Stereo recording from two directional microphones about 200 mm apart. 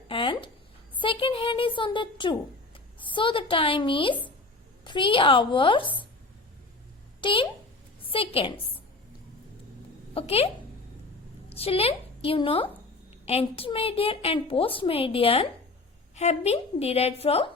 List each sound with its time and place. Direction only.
0.1 s a sound: 25° left (ahead or behind)
1.0 s a woman's voice: 25° left (ahead or behind)
7.2 s a woman's voice: 25° left (ahead or behind)
10.2 s a woman's voice: 30° left (ahead or behind)